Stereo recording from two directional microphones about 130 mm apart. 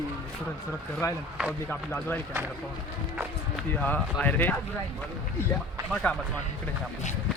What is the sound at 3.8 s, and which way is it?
Speech, 10° left (ahead or behind).